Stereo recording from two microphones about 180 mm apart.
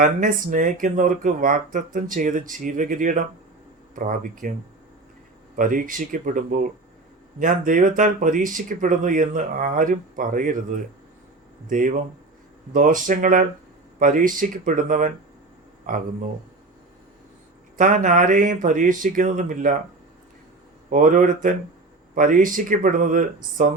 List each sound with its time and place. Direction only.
0.0 s speech: 45° right (ahead or behind)
5.5 s speech: 50° right (ahead or behind)
11.7 s speech: 45° right (ahead or behind)
17.7 s speech: 45° right (ahead or behind)
20.9 s speech: 45° right (ahead or behind)